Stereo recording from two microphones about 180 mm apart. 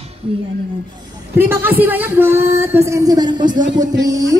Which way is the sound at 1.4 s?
10° right (ahead or behind).